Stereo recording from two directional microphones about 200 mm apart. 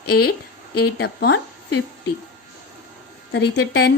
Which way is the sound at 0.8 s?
55° left (ahead or behind).